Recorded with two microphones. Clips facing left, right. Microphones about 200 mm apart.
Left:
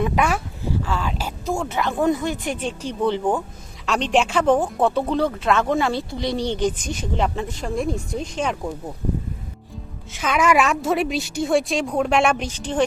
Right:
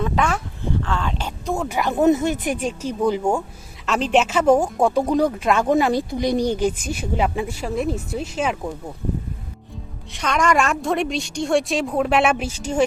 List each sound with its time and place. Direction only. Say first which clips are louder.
0.0 s speech: left 1 dB; 10° left (ahead or behind); by 8.7 s 5° right (ahead or behind)
10.1 s a woman's voice: left 1 dB; 5° left (ahead or behind)